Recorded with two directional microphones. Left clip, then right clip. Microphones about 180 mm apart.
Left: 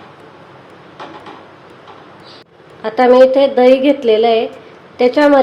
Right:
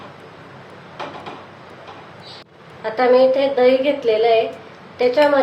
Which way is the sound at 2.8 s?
60° left (ahead or behind).